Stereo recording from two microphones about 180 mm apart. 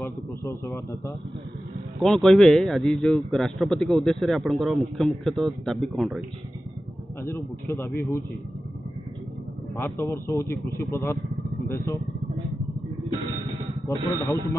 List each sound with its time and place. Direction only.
0.0 s a man's voice: 15° left (ahead or behind)
2.0 s a man's voice: centre (ahead or behind)
7.2 s a man's voice: 15° left (ahead or behind)
9.8 s a man's voice: 15° left (ahead or behind)
13.9 s a man's voice: 15° left (ahead or behind)